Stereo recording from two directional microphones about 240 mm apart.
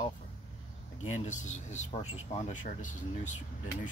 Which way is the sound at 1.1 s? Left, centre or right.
Left.